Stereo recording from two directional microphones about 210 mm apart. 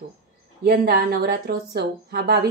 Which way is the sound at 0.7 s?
45° right (ahead or behind).